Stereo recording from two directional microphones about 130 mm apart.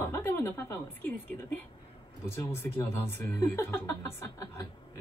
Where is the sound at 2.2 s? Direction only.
20° left (ahead or behind).